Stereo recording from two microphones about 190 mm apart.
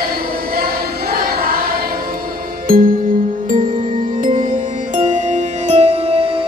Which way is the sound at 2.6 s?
50° right (ahead or behind).